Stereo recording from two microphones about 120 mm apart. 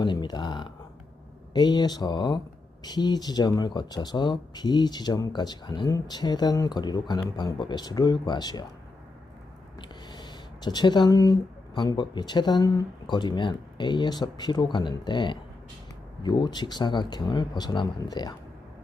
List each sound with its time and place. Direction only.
0.0 s a sound: 40° left (ahead or behind)
1.5 s speech: 35° left (ahead or behind)
9.9 s speech: 35° left (ahead or behind)